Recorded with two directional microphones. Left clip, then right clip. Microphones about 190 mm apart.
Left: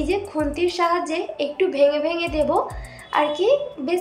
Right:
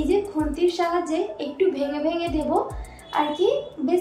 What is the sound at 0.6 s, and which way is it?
A woman's voice, 35° left (ahead or behind).